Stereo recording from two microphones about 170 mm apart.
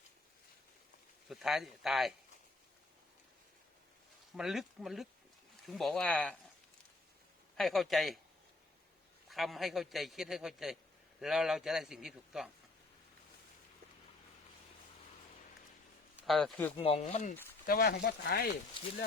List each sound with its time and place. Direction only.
1.3 s a man's voice: centre (ahead or behind)
4.4 s a man's voice: centre (ahead or behind)
7.5 s a man's voice: centre (ahead or behind)
9.3 s a man's voice: centre (ahead or behind)
16.2 s speech: centre (ahead or behind)
16.7 s chopping: 35° left (ahead or behind)
17.7 s speech: 60° left (ahead or behind)